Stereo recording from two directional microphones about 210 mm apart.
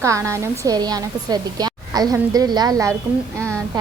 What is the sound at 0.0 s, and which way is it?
A woman's voice, 15° right (ahead or behind).